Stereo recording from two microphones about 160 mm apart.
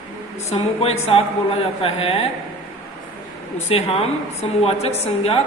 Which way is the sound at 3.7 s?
40° left (ahead or behind).